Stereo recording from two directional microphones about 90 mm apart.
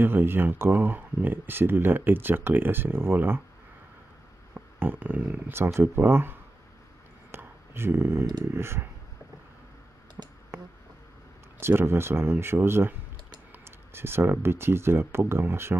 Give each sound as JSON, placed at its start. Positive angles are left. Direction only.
{"t": 0.0, "sound": "speech", "side_deg": -25}
{"t": 4.6, "sound": "speech", "side_deg": -20}
{"t": 7.2, "sound": "a sound", "side_deg": -25}
{"t": 8.5, "sound": "speech", "side_deg": -30}
{"t": 10.2, "sound": "a sound", "side_deg": -15}
{"t": 11.6, "sound": "speech", "side_deg": -25}